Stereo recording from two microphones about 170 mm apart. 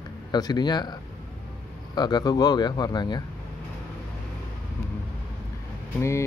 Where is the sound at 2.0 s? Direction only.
25° left (ahead or behind).